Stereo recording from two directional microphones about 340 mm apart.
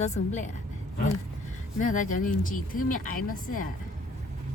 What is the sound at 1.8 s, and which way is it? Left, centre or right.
A woman's voice, left.